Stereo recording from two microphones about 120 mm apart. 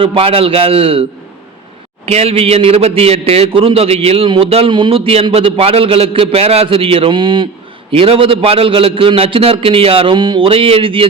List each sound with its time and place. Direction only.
0.0 s a man's voice: 50° right (ahead or behind)
2.0 s a man's voice: 55° right (ahead or behind)